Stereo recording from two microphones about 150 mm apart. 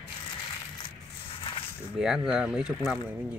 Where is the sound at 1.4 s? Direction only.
35° left (ahead or behind).